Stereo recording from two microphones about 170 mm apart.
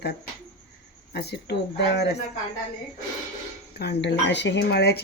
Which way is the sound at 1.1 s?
75° left (ahead or behind).